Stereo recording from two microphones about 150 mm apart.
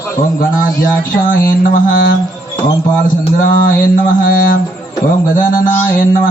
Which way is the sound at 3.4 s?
65° left (ahead or behind).